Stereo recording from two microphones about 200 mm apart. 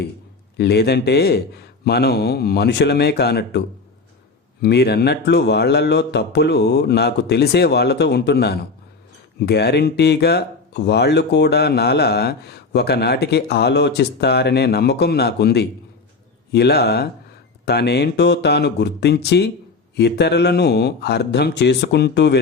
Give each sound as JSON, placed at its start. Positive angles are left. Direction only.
{"t": 0.5, "sound": "speech", "side_deg": 55}
{"t": 4.6, "sound": "speech", "side_deg": 55}